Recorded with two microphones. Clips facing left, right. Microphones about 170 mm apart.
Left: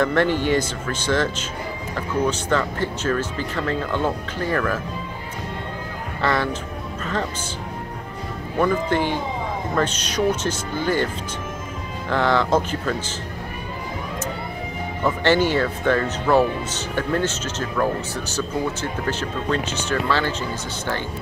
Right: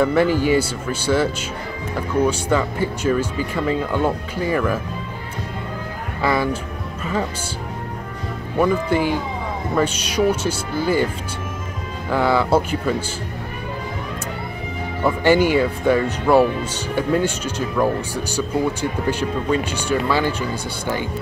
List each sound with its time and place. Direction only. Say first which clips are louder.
0.0 s speech: right 3 dB; 5° right (ahead or behind)
6.2 s speech: right 2 dB; 10° right (ahead or behind)
8.5 s speech: right 2 dB; 10° right (ahead or behind)
12.1 s speech: right 2 dB; 10° right (ahead or behind)
15.0 s speech: right 3 dB; 10° right (ahead or behind)